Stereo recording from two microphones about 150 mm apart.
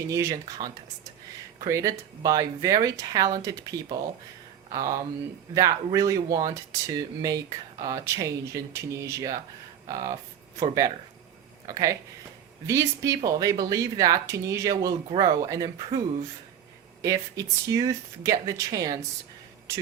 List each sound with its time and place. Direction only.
0.1 s speech: 20° right (ahead or behind)
17.0 s speech: 20° right (ahead or behind)